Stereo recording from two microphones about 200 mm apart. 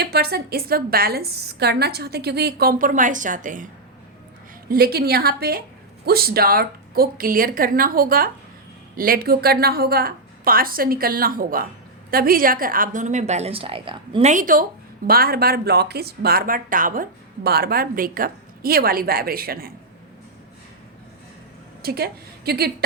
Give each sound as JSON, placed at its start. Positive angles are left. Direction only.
{"t": 0.0, "sound": "speech", "side_deg": -50}
{"t": 4.7, "sound": "a woman's voice", "side_deg": -50}
{"t": 21.8, "sound": "a woman's voice", "side_deg": -50}